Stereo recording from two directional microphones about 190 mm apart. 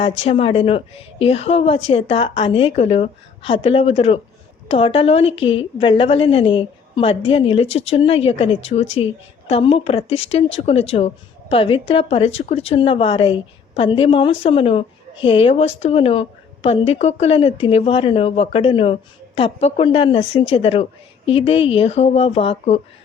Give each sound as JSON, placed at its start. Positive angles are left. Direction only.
{"t": 0.0, "sound": "a woman's voice", "side_deg": 30}